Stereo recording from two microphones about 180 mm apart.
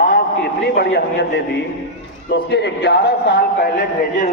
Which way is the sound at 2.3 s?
70° left (ahead or behind).